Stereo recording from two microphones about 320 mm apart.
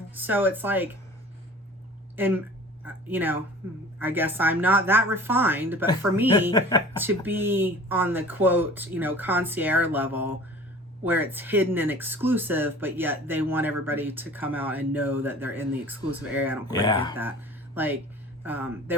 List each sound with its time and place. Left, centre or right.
0.1 s speech: centre
2.1 s speech: centre
6.5 s speech: centre
7.0 s speech: centre
16.6 s speech: centre
18.4 s speech: centre